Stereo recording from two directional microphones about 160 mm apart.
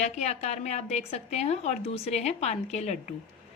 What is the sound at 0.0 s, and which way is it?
A woman's voice, 45° left (ahead or behind).